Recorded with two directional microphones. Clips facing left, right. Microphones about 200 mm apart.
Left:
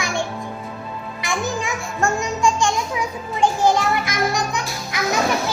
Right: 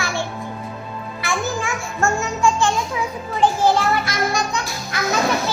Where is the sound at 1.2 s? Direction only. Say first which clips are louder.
Even; 15° left (ahead or behind).